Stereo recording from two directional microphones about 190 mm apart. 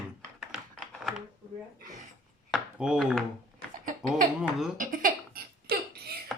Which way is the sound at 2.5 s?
5° right (ahead or behind).